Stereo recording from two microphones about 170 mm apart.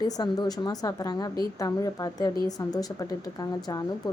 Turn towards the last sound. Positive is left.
turn(degrees=20)  # may be behind; listen again after turning